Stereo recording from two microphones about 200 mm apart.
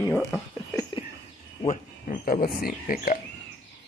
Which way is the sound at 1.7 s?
45° left (ahead or behind).